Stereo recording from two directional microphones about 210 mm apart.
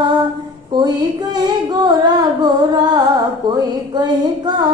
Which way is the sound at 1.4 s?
20° right (ahead or behind).